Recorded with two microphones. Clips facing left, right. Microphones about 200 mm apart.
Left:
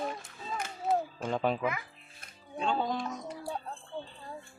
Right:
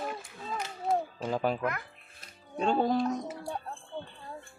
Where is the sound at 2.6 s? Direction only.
45° right (ahead or behind).